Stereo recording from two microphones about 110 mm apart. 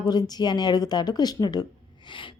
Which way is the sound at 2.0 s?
50° left (ahead or behind).